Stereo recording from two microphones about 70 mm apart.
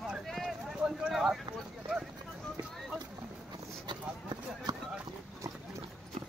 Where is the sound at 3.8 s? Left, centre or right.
Right.